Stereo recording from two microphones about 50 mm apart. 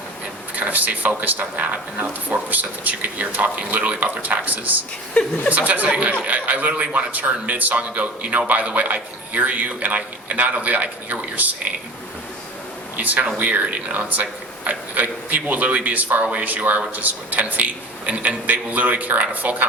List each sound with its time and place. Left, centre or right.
0.5 s a man's voice: right
5.2 s a woman's voice: left
5.5 s a man's voice: right
13.0 s a man's voice: right